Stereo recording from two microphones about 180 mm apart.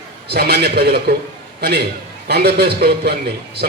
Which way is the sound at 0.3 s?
65° right (ahead or behind).